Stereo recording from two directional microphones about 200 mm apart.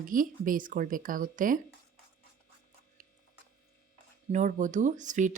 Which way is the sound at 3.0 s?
40° right (ahead or behind).